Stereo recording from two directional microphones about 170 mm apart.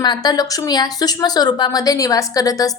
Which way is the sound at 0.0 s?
25° left (ahead or behind).